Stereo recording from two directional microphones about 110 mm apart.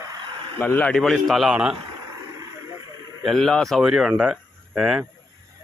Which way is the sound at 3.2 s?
Centre (ahead or behind).